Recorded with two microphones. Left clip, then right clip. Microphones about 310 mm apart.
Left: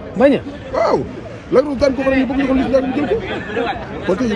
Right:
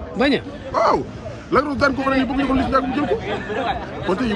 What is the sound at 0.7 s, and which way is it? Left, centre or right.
A man's voice, right.